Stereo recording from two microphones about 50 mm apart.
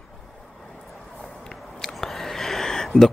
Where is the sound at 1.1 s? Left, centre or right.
Centre.